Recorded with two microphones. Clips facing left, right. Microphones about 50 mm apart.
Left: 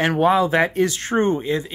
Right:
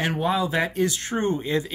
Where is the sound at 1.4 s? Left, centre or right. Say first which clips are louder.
Left 2 dB; centre.